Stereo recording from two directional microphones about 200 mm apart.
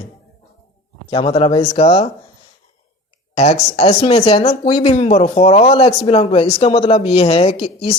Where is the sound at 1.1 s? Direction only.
30° left (ahead or behind).